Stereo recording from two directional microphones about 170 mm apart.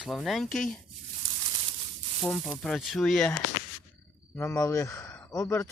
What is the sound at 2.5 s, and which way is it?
Speech, 5° left (ahead or behind).